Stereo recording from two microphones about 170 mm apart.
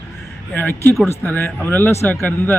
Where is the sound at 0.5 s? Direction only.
10° left (ahead or behind).